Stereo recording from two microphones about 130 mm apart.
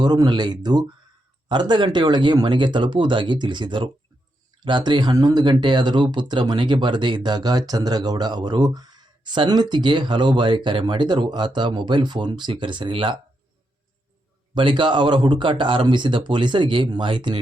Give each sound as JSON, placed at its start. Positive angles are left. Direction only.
{"t": 0.0, "sound": "speech", "side_deg": -30}
{"t": 14.5, "sound": "speech", "side_deg": -40}